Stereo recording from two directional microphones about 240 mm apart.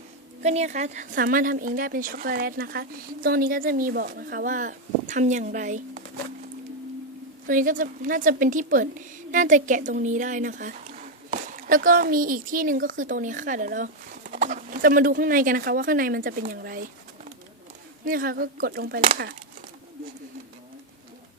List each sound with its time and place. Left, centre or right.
0.4 s a woman's voice: right
7.4 s a woman's voice: right
18.0 s a woman's voice: right